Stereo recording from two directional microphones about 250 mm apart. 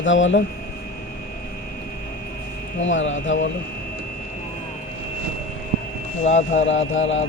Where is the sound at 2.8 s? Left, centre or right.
Left.